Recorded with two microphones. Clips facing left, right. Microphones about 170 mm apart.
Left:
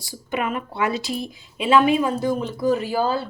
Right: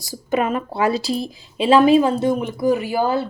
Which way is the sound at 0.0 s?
40° right (ahead or behind).